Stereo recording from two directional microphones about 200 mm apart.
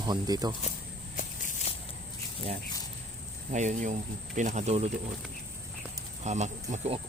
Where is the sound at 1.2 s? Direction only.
40° left (ahead or behind).